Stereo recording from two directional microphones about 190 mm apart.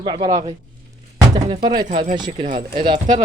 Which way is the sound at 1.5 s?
25° right (ahead or behind).